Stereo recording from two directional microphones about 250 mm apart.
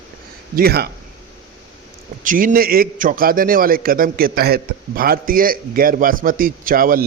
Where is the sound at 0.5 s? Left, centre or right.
Right.